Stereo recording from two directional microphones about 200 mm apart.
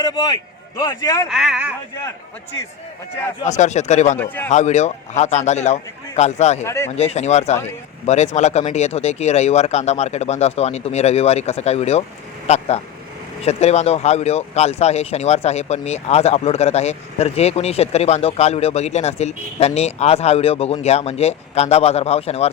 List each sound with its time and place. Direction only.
0.0 s speech: 20° left (ahead or behind)
1.3 s speech: centre (ahead or behind)
3.4 s speech: 35° left (ahead or behind)
6.7 s speech: 15° left (ahead or behind)
6.9 s speech: 35° left (ahead or behind)